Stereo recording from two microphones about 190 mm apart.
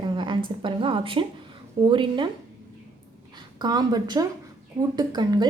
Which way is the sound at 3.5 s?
20° right (ahead or behind).